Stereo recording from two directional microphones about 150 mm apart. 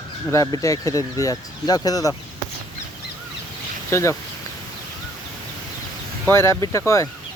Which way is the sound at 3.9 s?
20° left (ahead or behind).